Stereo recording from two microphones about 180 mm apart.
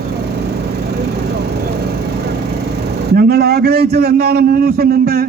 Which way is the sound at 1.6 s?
65° right (ahead or behind).